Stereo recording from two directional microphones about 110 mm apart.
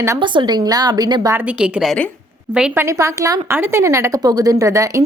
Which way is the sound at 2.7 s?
25° right (ahead or behind).